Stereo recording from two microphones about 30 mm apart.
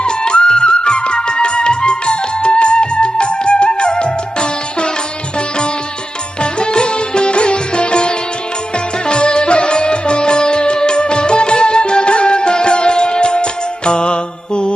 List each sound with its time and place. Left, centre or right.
0.0 s music: left
6.4 s music: left